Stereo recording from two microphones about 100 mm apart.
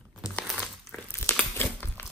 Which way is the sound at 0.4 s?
10° left (ahead or behind).